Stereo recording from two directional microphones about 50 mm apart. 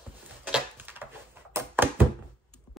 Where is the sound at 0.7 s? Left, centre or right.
Right.